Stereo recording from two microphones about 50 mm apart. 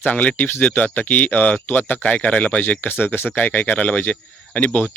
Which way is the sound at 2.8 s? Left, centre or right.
Left.